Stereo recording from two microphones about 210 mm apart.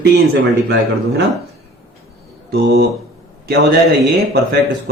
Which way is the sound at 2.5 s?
50° right (ahead or behind).